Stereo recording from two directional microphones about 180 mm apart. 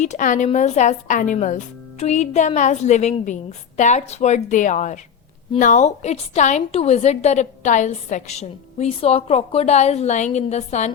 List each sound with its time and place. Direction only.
0.0 s a woman's voice: 45° left (ahead or behind)